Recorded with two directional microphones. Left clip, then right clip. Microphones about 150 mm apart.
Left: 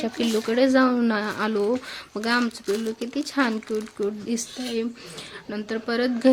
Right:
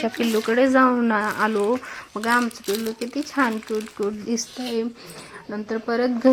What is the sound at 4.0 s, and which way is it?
A woman's voice, 15° left (ahead or behind).